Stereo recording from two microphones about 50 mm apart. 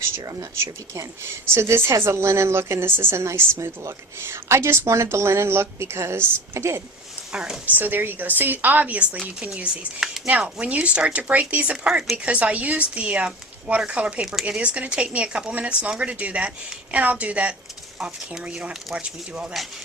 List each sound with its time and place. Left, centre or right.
0.3 s speech: right
7.3 s speech: centre
7.6 s speech: right
10.2 s speech: right
18.9 s speech: right